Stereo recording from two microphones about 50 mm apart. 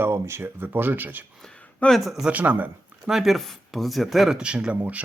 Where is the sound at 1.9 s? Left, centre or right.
Centre.